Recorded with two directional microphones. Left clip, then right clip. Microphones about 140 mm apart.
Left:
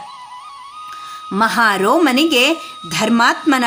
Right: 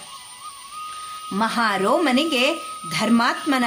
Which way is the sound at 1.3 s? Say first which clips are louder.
Left 7 dB; 35° left (ahead or behind).